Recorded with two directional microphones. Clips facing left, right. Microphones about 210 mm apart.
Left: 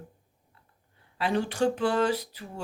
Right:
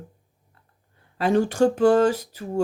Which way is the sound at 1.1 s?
45° right (ahead or behind).